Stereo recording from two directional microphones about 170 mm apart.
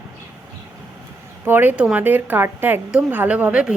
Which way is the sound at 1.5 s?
10° right (ahead or behind).